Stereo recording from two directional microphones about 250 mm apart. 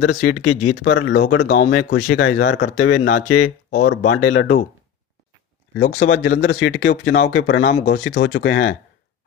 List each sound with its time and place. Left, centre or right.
0.0 s speech: left
0.4 s speech: left
0.8 s speech: left
1.5 s speech: left
2.2 s speech: left
3.2 s speech: left
3.8 s speech: left
5.9 s speech: left